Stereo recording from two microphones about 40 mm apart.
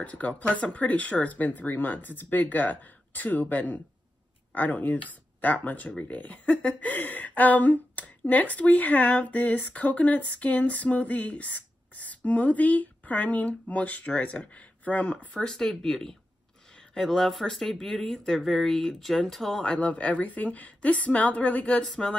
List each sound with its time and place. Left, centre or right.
0.0 s speech: left; by 19.6 s centre
19.6 s speech: left
19.9 s speech: left
21.8 s speech: left